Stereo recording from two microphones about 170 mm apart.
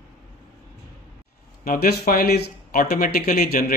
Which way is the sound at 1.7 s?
60° left (ahead or behind).